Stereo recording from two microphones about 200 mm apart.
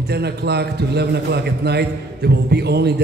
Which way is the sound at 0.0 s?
55° right (ahead or behind).